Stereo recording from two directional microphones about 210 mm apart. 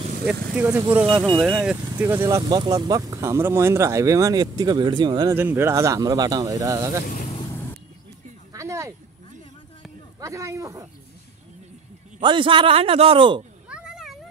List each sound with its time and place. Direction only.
0.3 s speech: 10° right (ahead or behind)
1.0 s a man's voice: 20° right (ahead or behind)
1.4 s speech: 5° right (ahead or behind)
2.1 s speech: 15° right (ahead or behind)
7.1 s vehicle: 40° left (ahead or behind)
8.5 s a sound: 15° right (ahead or behind)
10.2 s speech: 15° right (ahead or behind)
12.2 s a man's voice: 20° right (ahead or behind)
13.7 s a sound: 5° right (ahead or behind)